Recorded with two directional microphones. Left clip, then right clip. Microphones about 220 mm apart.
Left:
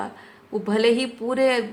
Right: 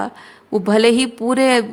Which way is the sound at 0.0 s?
50° right (ahead or behind).